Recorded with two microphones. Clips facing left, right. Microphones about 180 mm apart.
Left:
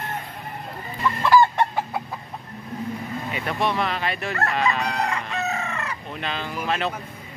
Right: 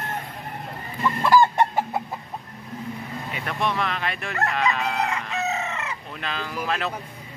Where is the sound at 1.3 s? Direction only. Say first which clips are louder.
Even; 15° right (ahead or behind).